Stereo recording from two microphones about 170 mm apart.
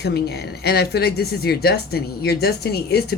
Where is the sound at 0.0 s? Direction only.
75° left (ahead or behind).